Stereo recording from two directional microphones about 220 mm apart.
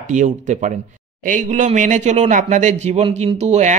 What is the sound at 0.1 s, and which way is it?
Speech, 35° right (ahead or behind).